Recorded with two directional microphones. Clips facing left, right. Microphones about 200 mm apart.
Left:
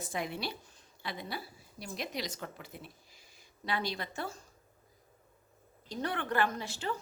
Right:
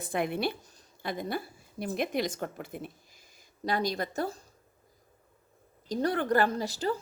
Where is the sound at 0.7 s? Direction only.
45° right (ahead or behind).